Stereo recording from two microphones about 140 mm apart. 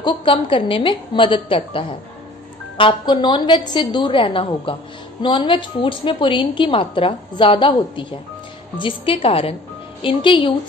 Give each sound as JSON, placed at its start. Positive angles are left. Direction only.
{"t": 0.0, "sound": "a woman's voice", "side_deg": 35}